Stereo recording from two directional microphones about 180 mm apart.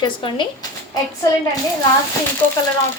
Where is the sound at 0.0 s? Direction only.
25° left (ahead or behind).